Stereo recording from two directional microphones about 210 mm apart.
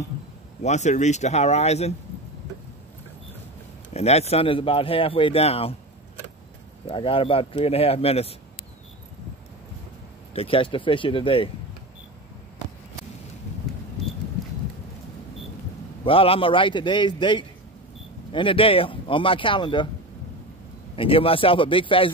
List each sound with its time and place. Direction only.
0.6 s speech: 35° left (ahead or behind)
3.9 s speech: 30° left (ahead or behind)
6.9 s speech: 25° left (ahead or behind)
10.3 s speech: 25° left (ahead or behind)
16.0 s speech: 25° left (ahead or behind)
20.9 s speech: 25° left (ahead or behind)